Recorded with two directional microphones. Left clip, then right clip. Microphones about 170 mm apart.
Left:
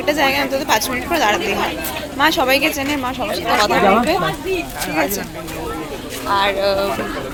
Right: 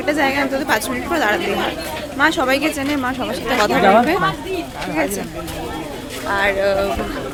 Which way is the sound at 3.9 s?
35° right (ahead or behind).